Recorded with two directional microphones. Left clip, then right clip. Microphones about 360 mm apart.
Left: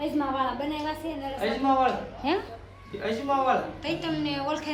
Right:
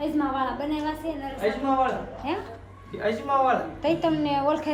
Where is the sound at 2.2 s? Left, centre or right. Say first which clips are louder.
Left 3 dB; left.